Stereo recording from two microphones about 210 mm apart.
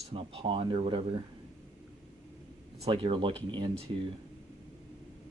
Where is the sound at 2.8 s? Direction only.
25° right (ahead or behind).